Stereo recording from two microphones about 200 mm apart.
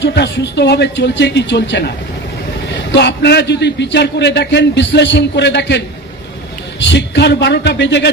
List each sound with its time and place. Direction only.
0.0 s a man's voice: 60° left (ahead or behind)
2.9 s a man's voice: 60° left (ahead or behind)
6.9 s a man's voice: 60° left (ahead or behind)